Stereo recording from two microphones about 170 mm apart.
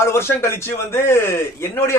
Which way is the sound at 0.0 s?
15° left (ahead or behind).